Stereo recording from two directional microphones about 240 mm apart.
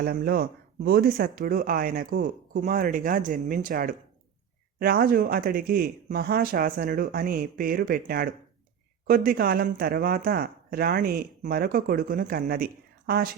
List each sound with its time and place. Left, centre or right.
0.0 s speech: right